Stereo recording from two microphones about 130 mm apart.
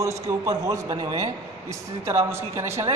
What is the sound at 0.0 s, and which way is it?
A woman's voice, 25° right (ahead or behind).